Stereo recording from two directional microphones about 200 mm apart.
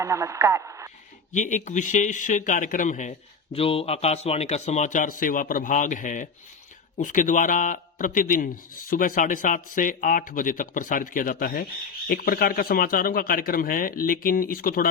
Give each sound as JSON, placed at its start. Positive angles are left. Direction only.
{"t": 0.0, "sound": "speech", "side_deg": -15}
{"t": 1.3, "sound": "speech", "side_deg": 35}